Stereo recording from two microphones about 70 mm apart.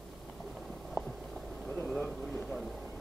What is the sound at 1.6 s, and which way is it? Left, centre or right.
Vehicle, centre.